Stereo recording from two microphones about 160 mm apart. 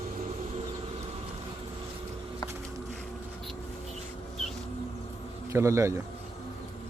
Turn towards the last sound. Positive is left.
turn(degrees=-15)  # may be behind; listen again after turning